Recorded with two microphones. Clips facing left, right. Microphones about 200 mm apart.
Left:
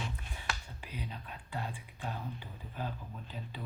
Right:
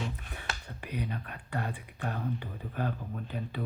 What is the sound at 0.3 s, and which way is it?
Speech, 60° right (ahead or behind).